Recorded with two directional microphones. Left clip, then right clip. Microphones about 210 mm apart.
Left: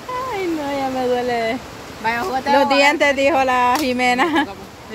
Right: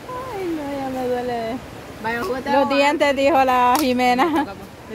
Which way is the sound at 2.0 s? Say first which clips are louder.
Left 4 dB; 30° left (ahead or behind).